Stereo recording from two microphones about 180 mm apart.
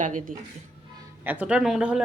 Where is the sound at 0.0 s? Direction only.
45° right (ahead or behind).